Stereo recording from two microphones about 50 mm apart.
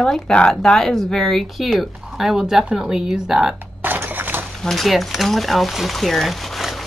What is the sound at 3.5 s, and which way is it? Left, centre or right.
Music, right.